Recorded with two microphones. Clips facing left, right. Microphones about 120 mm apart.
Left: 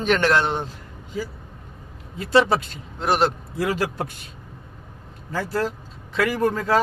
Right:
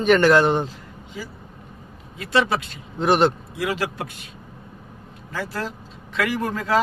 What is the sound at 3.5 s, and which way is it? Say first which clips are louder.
Speech: left 2 dB; 40° left (ahead or behind).